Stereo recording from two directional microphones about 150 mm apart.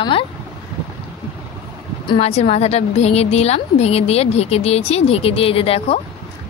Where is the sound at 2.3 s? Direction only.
45° left (ahead or behind).